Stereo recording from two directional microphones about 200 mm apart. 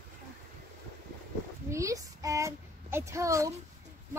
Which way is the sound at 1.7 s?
15° right (ahead or behind).